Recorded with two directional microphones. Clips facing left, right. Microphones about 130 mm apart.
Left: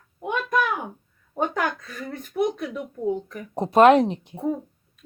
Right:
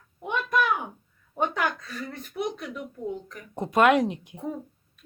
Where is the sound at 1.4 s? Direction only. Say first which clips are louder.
Left 2 dB; 45° left (ahead or behind).